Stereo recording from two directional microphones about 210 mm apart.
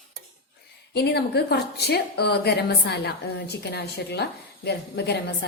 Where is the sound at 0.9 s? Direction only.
50° left (ahead or behind).